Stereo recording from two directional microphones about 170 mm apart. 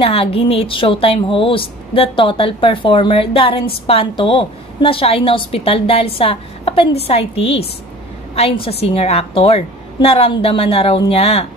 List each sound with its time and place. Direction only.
0.0 s a woman's voice: 35° left (ahead or behind)